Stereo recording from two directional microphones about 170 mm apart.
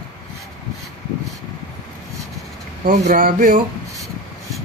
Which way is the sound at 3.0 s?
55° right (ahead or behind).